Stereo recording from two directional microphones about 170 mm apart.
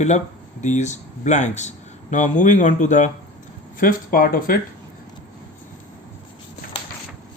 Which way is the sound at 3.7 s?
55° left (ahead or behind).